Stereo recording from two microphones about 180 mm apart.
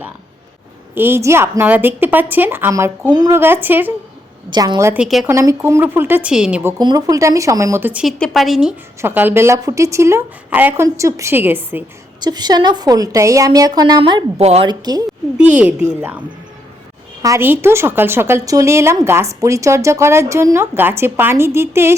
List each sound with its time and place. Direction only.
0.9 s a woman's voice: 15° right (ahead or behind)
4.4 s a woman's voice: 25° right (ahead or behind)
5.0 s a woman's voice: centre (ahead or behind)
5.3 s a woman's voice: 15° right (ahead or behind)
12.2 s a woman's voice: 25° right (ahead or behind)
14.7 s a woman's voice: 20° right (ahead or behind)
15.4 s a woman's voice: 5° right (ahead or behind)
17.2 s a woman's voice: 15° right (ahead or behind)